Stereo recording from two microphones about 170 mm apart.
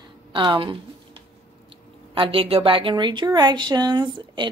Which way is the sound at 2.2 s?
35° right (ahead or behind).